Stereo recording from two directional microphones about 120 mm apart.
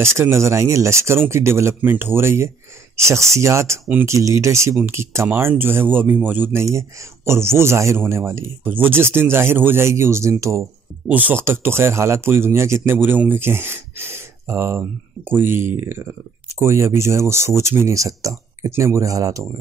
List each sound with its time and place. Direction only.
0.0 s speech: 20° right (ahead or behind)
11.1 s speech: 15° right (ahead or behind)